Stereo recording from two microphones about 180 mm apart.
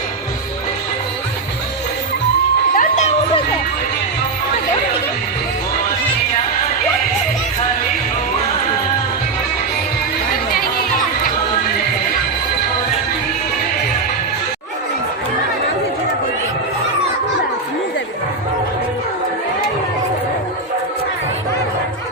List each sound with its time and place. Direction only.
2.7 s crowd: 50° left (ahead or behind)
10.5 s chatter: 55° left (ahead or behind)